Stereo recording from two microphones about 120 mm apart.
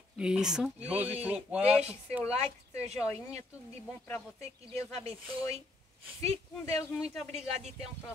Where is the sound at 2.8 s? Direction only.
60° right (ahead or behind).